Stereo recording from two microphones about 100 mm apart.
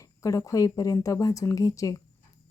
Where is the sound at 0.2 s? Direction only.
35° left (ahead or behind).